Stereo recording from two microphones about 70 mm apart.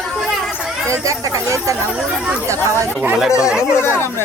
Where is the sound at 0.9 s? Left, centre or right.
Right.